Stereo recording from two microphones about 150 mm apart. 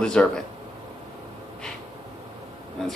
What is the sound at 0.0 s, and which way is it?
Speech, 5° left (ahead or behind).